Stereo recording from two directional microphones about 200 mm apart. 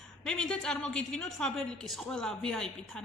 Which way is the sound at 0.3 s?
5° left (ahead or behind).